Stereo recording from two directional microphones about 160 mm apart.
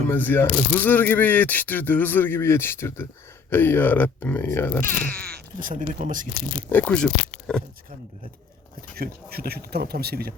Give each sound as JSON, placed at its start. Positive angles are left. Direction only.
{"t": 0.1, "sound": "speech", "side_deg": 10}
{"t": 5.5, "sound": "speech", "side_deg": -55}
{"t": 6.7, "sound": "speech", "side_deg": 10}
{"t": 9.0, "sound": "speech", "side_deg": -75}